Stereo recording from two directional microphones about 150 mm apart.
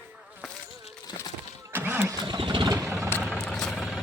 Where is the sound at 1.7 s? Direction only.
10° right (ahead or behind).